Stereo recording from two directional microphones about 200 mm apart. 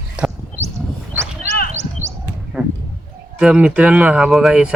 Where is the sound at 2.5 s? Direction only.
Centre (ahead or behind).